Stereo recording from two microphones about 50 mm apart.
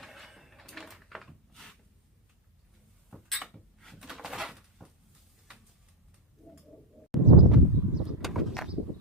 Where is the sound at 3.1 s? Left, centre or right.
Centre.